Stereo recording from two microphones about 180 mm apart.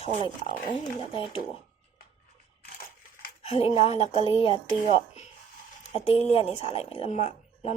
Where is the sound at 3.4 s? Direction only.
35° left (ahead or behind).